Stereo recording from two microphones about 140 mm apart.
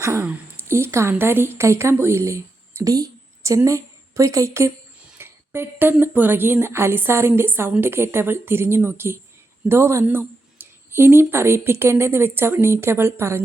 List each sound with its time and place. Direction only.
0.0 s a woman's voice: 20° right (ahead or behind)